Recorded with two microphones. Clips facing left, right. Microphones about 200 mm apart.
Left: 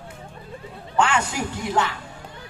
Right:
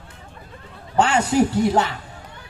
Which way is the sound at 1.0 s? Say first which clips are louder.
Right 5 dB; 35° right (ahead or behind).